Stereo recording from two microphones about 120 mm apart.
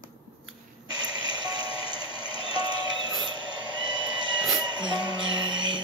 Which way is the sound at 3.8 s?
40° right (ahead or behind).